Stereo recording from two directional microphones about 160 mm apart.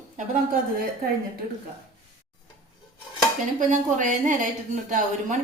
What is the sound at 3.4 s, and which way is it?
A woman's voice, 50° right (ahead or behind).